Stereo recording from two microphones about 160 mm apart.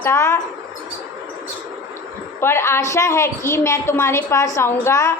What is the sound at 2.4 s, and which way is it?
A woman's voice, 15° left (ahead or behind).